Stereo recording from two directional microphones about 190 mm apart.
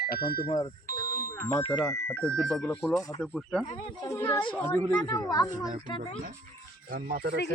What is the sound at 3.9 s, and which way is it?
Speech, 20° left (ahead or behind).